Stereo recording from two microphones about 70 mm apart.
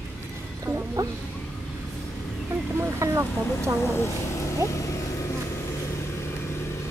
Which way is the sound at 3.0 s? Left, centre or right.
Right.